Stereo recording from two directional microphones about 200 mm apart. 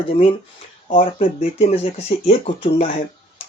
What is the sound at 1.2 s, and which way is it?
Speech, 30° left (ahead or behind).